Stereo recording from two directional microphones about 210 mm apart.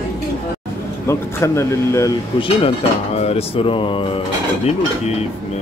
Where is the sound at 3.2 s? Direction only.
30° left (ahead or behind).